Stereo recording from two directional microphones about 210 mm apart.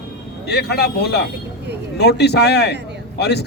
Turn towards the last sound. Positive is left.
turn(degrees=50)  # may be behind; listen again after turning